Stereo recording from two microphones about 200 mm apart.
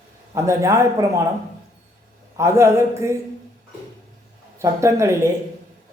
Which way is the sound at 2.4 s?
15° right (ahead or behind).